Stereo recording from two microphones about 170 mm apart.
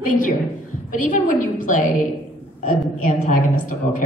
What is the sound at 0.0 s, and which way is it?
A woman's voice, 50° left (ahead or behind).